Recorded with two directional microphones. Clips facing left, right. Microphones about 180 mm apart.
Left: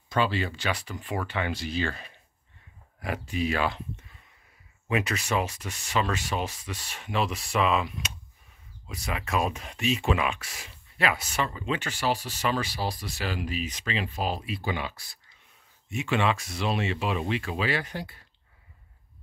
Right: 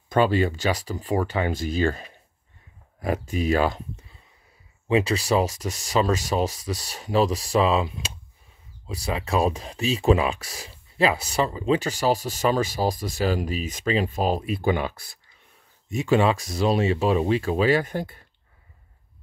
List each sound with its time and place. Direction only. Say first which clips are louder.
0.1 s speech: right 7 dB; 45° right (ahead or behind)
4.8 s speech: right 7 dB; 30° right (ahead or behind); by 15.1 s 50° right (ahead or behind)
15.9 s speech: right 6 dB; 40° right (ahead or behind)